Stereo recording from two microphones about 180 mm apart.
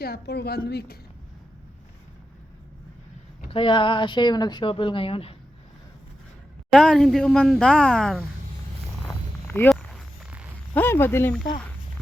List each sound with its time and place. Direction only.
0.0 s a woman's voice: 65° left (ahead or behind)
3.5 s speech: 30° left (ahead or behind)
6.7 s a woman's voice: 5° left (ahead or behind)
9.6 s a sound: 5° right (ahead or behind)
10.8 s speech: 10° left (ahead or behind)